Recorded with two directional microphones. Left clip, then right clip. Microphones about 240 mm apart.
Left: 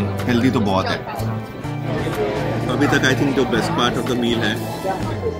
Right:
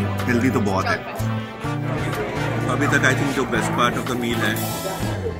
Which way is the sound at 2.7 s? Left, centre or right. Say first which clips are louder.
Left 1 dB; centre.